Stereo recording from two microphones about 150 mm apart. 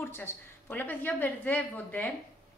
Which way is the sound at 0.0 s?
15° left (ahead or behind).